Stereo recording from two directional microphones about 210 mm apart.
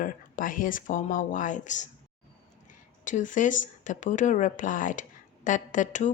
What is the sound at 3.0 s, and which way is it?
Speech, 40° left (ahead or behind).